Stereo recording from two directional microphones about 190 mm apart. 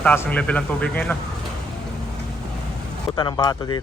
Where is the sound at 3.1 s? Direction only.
25° left (ahead or behind).